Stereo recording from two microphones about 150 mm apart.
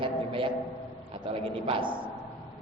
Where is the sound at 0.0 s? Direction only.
35° right (ahead or behind).